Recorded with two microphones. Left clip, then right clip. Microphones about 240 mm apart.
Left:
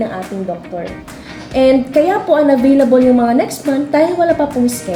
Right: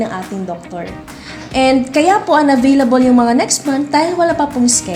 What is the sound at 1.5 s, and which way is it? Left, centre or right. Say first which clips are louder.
A woman's voice: left 2 dB; right.